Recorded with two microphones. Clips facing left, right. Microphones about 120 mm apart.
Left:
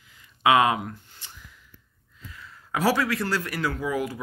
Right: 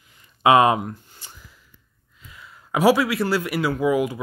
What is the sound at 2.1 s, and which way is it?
Speech, 15° right (ahead or behind).